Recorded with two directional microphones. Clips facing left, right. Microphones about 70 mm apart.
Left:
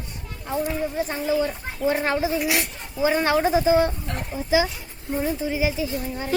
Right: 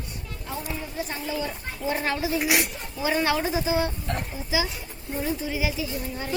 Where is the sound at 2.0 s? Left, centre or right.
Left.